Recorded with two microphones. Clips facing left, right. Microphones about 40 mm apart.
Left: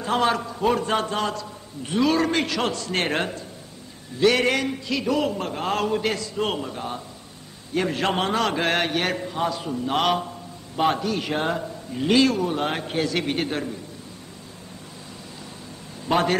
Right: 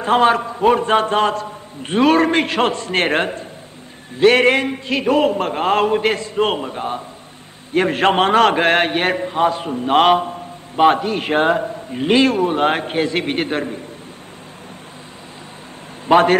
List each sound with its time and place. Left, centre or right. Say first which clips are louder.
0.0 s a man's voice: right 8 dB; right
7.7 s a man's voice: right 8 dB; right
16.1 s a man's voice: right 9 dB; right